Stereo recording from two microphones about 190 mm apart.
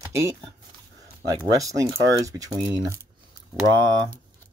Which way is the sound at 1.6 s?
15° right (ahead or behind).